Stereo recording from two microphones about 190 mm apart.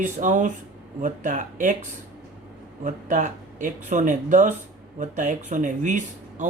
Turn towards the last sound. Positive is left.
turn(degrees=-40)  # may be behind; listen again after turning